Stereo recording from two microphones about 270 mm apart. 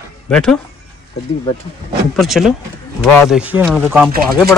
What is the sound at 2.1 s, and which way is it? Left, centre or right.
Speech, centre.